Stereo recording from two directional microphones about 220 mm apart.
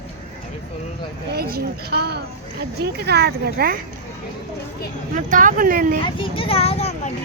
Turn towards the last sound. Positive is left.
turn(degrees=30)  # may be behind; listen again after turning